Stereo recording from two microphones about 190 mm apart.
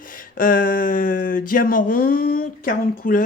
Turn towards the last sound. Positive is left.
turn(degrees=45)  # may be behind; listen again after turning